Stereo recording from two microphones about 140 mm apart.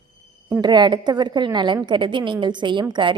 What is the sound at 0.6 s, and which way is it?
A woman's voice, 30° right (ahead or behind).